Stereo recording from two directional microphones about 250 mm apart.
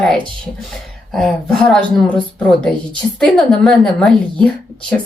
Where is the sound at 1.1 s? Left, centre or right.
Centre.